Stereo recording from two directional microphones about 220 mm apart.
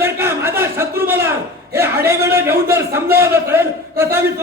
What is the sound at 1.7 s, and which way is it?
A man's voice, 10° right (ahead or behind).